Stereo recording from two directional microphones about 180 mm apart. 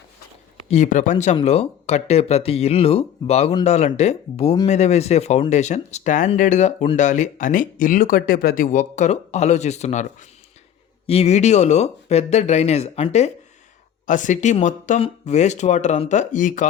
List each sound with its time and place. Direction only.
0.7 s speech: 45° left (ahead or behind)
14.1 s speech: 45° left (ahead or behind)